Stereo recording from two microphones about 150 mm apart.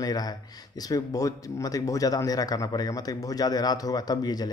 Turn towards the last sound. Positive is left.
turn(degrees=25)  # may be behind; listen again after turning